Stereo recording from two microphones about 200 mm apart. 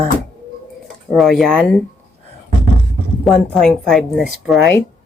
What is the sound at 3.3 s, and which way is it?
Speech, centre (ahead or behind).